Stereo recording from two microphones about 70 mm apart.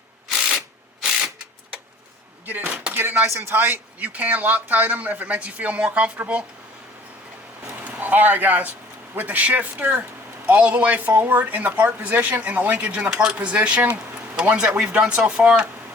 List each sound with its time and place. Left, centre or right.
0.3 s camera: centre
2.5 s speech: right
7.9 s speech: right